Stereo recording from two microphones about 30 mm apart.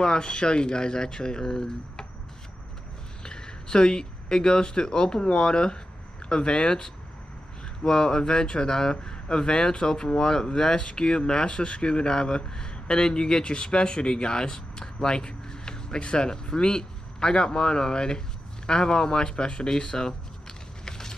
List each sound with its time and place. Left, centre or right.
0.0 s speech: left
3.3 s speech: left